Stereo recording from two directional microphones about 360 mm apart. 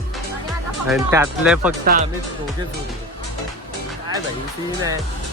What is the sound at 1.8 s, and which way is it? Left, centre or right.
Speech, right.